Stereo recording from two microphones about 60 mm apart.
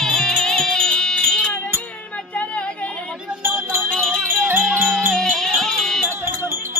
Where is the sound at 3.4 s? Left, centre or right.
Right.